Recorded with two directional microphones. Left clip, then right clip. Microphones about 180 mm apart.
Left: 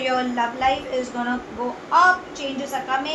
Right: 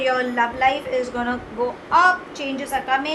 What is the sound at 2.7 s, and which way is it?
Speech, 45° right (ahead or behind).